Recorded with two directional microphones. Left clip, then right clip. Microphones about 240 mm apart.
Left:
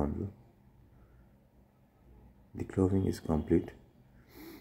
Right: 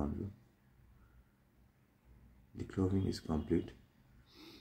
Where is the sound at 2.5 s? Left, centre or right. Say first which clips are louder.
Left 7 dB; centre.